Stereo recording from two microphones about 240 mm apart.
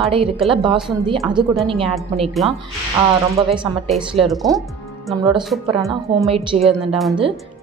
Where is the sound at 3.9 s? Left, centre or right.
Centre.